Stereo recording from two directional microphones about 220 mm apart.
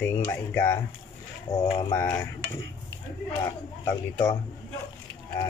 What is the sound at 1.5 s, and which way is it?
Speech, 20° left (ahead or behind).